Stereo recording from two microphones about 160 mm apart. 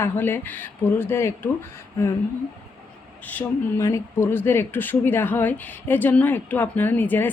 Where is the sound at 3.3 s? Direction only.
15° left (ahead or behind).